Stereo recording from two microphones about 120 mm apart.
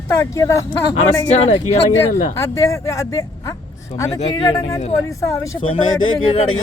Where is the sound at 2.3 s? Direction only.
25° left (ahead or behind).